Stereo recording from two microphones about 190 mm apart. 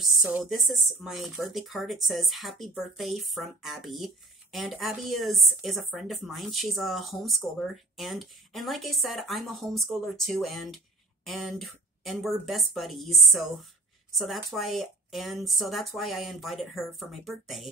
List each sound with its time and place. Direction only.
0.0 s speech: centre (ahead or behind)